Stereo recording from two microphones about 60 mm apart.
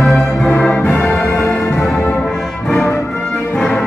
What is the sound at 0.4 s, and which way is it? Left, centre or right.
Music, centre.